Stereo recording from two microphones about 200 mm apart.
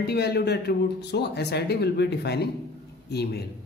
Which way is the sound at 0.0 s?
55° left (ahead or behind).